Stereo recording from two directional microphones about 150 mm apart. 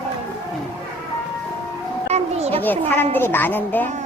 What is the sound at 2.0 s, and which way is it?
Children playing, 45° right (ahead or behind).